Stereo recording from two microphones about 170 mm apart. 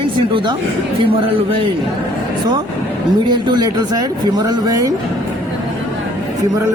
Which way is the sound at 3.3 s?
25° right (ahead or behind).